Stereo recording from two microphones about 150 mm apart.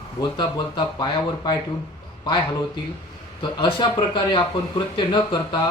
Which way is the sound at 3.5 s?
30° left (ahead or behind).